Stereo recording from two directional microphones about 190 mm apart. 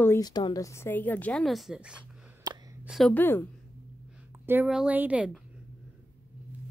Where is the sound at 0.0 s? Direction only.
15° left (ahead or behind); by 2.0 s 5° right (ahead or behind).